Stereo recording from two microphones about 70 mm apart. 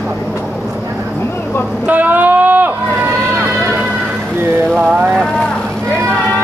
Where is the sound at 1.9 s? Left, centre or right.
Right.